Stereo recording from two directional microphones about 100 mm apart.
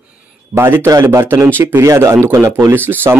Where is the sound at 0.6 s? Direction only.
20° right (ahead or behind).